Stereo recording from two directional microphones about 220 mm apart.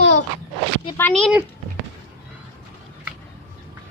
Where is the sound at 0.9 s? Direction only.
5° left (ahead or behind).